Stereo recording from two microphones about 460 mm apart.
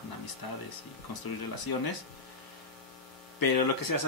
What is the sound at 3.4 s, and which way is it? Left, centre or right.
Speech, left.